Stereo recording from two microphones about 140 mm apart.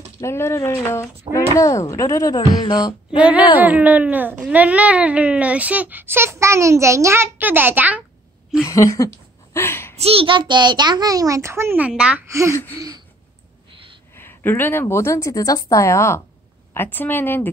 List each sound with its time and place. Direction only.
0.2 s speech: 20° left (ahead or behind)
2.6 s a sound: 30° left (ahead or behind)
3.2 s a child's voice: 10° right (ahead or behind)
8.6 s a woman's voice: 20° left (ahead or behind)
9.9 s a child's voice: 45° right (ahead or behind); by 12.3 s 10° right (ahead or behind)
12.3 s a child's voice: 20° right (ahead or behind)
14.1 s a woman's voice: 15° left (ahead or behind)